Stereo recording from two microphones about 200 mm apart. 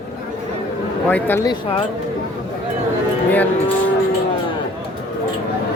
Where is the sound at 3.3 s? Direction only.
10° left (ahead or behind).